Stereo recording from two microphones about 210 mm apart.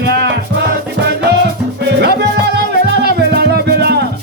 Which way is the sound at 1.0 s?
55° right (ahead or behind).